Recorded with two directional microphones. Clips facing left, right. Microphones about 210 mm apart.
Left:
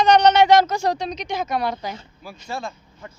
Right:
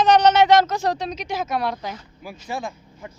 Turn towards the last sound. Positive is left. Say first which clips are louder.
# right 1 dB
turn(degrees=-15)  # may be behind; listen again after turning